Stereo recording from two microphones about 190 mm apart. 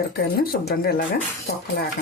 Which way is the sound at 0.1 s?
55° left (ahead or behind).